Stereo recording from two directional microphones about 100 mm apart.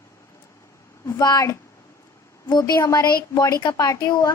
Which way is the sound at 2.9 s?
40° left (ahead or behind).